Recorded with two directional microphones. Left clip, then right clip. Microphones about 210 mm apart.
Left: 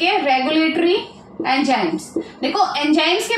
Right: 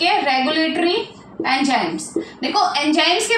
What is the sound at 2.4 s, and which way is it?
Speech, 15° left (ahead or behind).